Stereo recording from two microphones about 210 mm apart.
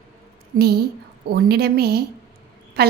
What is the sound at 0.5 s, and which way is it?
A woman's voice, 50° right (ahead or behind).